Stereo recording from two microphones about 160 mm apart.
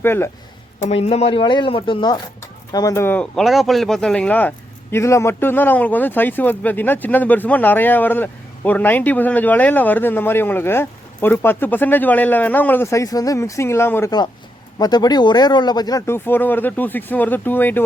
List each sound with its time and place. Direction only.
0.0 s speech: 15° left (ahead or behind)
0.9 s speech: 40° left (ahead or behind); by 17.8 s 10° left (ahead or behind)